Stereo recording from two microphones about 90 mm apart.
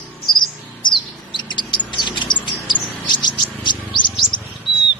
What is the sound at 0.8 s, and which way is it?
Bird, 60° left (ahead or behind).